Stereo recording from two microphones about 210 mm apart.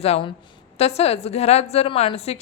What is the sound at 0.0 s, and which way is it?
A woman's voice, 30° left (ahead or behind).